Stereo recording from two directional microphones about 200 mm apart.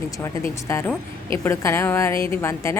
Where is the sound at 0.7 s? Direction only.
15° left (ahead or behind).